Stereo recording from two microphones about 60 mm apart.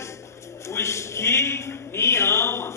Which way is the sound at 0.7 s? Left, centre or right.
Left.